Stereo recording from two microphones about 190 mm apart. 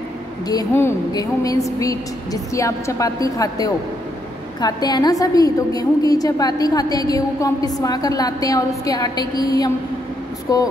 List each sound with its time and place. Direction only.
0.5 s a woman's voice: 15° left (ahead or behind)